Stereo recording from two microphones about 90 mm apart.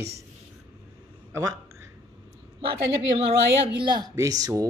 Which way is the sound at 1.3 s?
40° right (ahead or behind).